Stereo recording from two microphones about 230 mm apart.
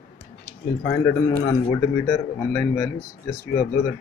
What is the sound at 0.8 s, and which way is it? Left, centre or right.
Speech, centre.